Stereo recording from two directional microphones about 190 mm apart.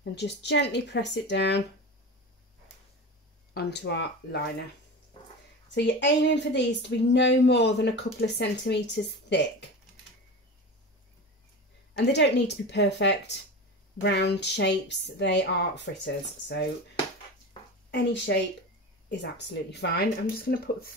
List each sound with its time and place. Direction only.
0.1 s a woman's voice: 65° left (ahead or behind)
3.5 s speech: 65° left (ahead or behind)
5.8 s a woman's voice: 70° left (ahead or behind)
11.9 s a woman's voice: 65° left (ahead or behind)
17.9 s a woman's voice: 65° left (ahead or behind); by 20.9 s 50° left (ahead or behind)